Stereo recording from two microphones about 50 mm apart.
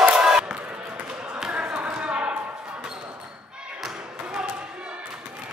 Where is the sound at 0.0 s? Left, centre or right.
Centre.